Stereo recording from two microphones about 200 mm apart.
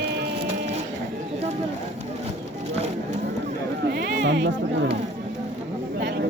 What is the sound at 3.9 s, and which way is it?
Music, 55° right (ahead or behind).